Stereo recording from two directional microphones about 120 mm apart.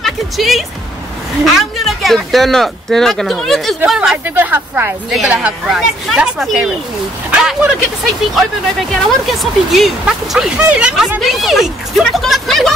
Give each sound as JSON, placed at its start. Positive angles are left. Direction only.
{"t": 0.0, "sound": "speech", "side_deg": 0}
{"t": 4.4, "sound": "speech", "side_deg": -15}